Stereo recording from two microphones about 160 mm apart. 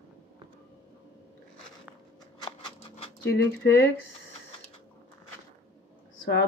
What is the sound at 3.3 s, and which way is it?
Speech, 90° left.